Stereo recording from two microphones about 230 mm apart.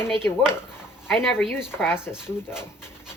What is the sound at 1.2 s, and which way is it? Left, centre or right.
Speech, centre.